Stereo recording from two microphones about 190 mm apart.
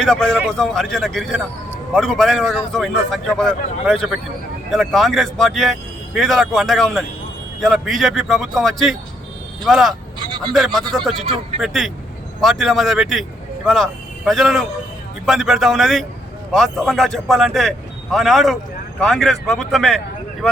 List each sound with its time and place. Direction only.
0.0 s a man's voice: 5° left (ahead or behind)
10.2 s vehicle: 25° right (ahead or behind)
10.5 s a man's voice: centre (ahead or behind)